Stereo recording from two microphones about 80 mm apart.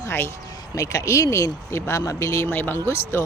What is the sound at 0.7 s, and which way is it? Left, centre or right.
Speech, left.